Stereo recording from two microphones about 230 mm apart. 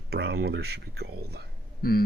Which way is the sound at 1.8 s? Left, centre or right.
Left.